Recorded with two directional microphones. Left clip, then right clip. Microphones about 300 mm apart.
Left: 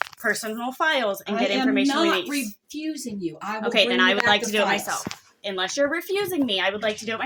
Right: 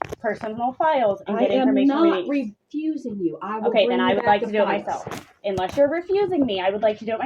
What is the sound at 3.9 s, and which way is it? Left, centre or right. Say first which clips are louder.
Speech: even; left.